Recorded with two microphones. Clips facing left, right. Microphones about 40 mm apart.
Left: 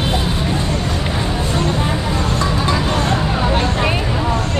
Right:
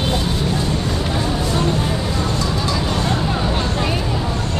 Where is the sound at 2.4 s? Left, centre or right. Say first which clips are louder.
Left 3 dB; left.